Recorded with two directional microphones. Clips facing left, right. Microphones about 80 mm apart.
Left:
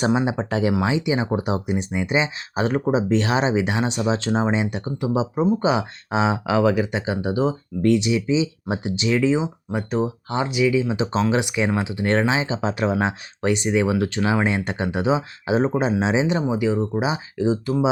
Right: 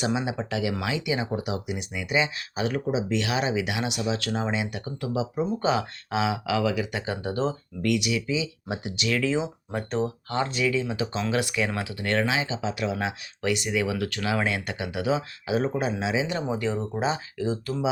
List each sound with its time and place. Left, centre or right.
0.0 s speech: left
6.9 s speech: centre
7.8 s speech: left; by 10.9 s centre
10.9 s speech: left
16.4 s speech: centre